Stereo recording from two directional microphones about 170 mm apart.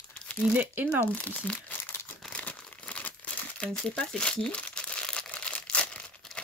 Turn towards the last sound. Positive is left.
turn(degrees=5)  # may be behind; listen again after turning